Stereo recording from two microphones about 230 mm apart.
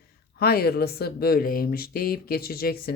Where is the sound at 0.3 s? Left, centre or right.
Left.